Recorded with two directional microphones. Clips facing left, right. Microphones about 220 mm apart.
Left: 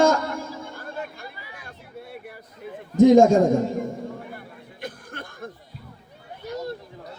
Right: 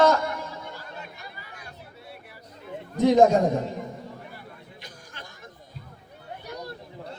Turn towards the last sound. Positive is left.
turn(degrees=55)  # may be behind; listen again after turning